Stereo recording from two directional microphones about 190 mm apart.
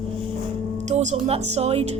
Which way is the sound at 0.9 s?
40° right (ahead or behind).